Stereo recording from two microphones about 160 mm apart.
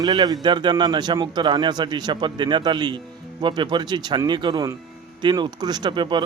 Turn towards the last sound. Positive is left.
turn(degrees=-30)  # may be behind; listen again after turning